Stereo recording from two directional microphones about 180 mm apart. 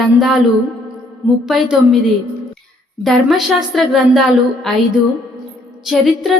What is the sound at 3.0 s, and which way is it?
Speech, centre (ahead or behind).